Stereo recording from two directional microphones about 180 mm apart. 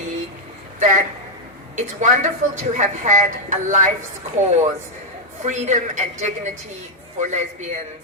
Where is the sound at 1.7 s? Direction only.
40° right (ahead or behind).